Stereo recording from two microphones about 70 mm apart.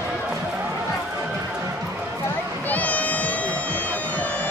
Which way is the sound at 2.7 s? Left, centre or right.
Left.